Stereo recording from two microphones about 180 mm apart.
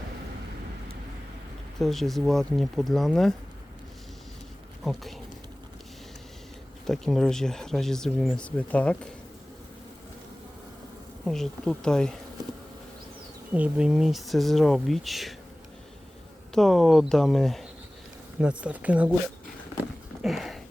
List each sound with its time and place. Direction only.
1.8 s speech: centre (ahead or behind)
4.8 s speech: centre (ahead or behind)
6.8 s speech: centre (ahead or behind)
11.3 s speech: centre (ahead or behind)
13.5 s speech: 5° right (ahead or behind)
16.6 s speech: centre (ahead or behind)
20.2 s a sound: centre (ahead or behind)